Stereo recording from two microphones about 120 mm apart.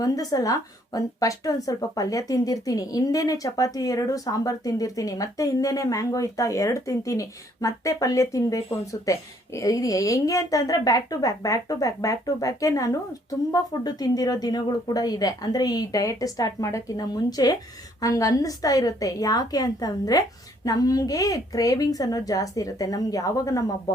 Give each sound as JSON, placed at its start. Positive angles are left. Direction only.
{"t": 0.0, "sound": "a woman's voice", "side_deg": 30}